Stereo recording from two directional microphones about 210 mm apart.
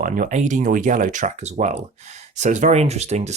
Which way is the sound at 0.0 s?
35° right (ahead or behind).